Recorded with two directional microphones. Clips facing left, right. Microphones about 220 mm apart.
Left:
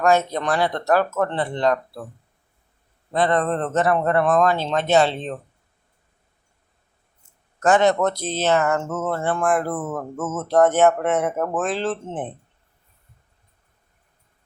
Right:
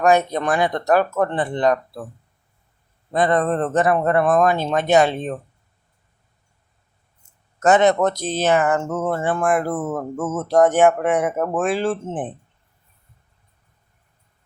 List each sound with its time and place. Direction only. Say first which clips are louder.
0.0 s speech: right 2 dB; 15° right (ahead or behind)
3.1 s speech: right 2 dB; 15° right (ahead or behind)
7.6 s speech: right 2 dB; 20° right (ahead or behind)